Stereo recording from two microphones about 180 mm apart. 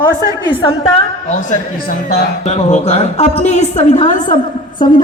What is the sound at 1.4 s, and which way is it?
Speech, 45° left (ahead or behind).